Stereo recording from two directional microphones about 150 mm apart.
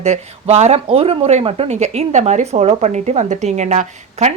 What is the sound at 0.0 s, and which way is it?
Speech, 45° right (ahead or behind).